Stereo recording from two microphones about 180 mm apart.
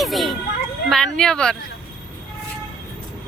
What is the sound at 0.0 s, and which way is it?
Children playing, centre (ahead or behind).